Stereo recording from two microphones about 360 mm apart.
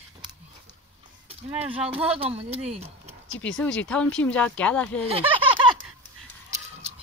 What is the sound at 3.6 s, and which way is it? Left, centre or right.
Speech, centre.